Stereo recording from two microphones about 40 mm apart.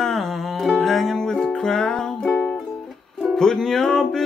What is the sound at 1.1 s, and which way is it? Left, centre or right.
Music, centre.